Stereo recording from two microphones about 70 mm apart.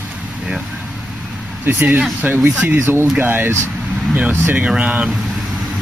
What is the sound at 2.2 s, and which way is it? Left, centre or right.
Speech, right.